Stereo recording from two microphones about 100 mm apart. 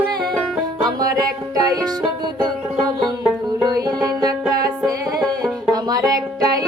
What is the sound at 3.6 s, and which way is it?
Music, 40° right (ahead or behind).